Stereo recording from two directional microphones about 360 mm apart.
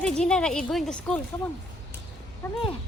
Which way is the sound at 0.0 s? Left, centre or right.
Centre.